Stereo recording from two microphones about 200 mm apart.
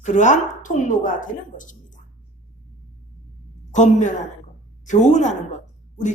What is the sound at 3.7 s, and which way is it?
A woman's voice, 35° left (ahead or behind).